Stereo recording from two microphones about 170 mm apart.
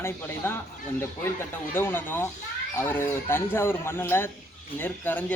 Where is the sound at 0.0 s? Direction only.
15° left (ahead or behind).